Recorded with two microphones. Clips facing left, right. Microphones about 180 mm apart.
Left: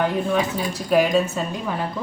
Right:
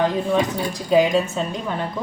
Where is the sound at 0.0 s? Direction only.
5° left (ahead or behind).